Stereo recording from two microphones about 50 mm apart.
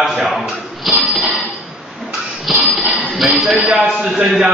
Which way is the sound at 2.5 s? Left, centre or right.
Centre.